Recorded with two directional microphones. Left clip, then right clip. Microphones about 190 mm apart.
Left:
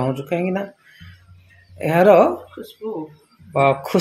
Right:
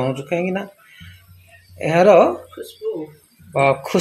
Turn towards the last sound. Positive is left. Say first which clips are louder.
# even
turn(degrees=0)  # may be behind; listen again after turning